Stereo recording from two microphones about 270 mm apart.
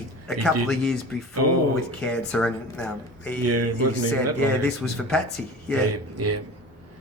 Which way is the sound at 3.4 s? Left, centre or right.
Right.